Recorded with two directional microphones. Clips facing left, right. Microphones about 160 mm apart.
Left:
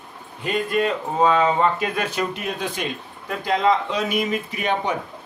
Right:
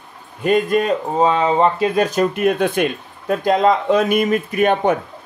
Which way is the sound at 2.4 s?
55° right (ahead or behind).